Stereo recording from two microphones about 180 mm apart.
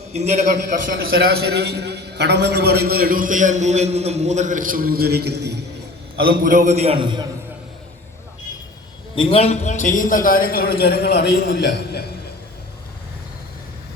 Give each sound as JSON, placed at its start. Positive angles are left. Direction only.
{"t": 0.1, "sound": "a man's voice", "side_deg": -40}
{"t": 6.1, "sound": "a man's voice", "side_deg": -55}
{"t": 9.1, "sound": "a man's voice", "side_deg": 35}